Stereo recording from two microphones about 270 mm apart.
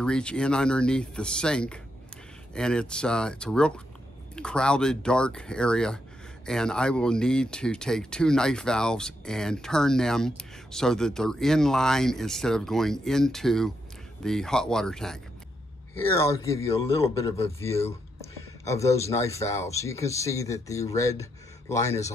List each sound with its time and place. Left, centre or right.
0.0 s a man's voice: centre
17.0 s a man's voice: left
17.6 s a man's voice: centre